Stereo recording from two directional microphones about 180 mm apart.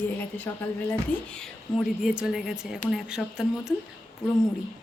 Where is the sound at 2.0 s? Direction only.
5° right (ahead or behind).